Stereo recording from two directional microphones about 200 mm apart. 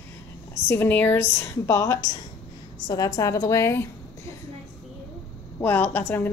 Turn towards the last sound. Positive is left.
turn(degrees=10)  # may be behind; listen again after turning